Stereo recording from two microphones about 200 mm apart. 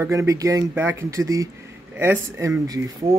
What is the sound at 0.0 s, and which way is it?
Speech, 15° right (ahead or behind).